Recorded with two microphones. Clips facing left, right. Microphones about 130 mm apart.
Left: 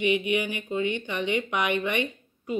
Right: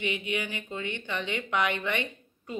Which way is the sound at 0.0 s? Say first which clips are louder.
Left 7 dB; 15° left (ahead or behind).